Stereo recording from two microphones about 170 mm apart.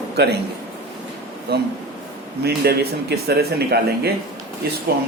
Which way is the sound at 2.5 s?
70° right (ahead or behind).